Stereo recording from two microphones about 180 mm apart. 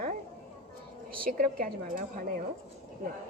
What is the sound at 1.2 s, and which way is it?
A woman's voice, 50° right (ahead or behind).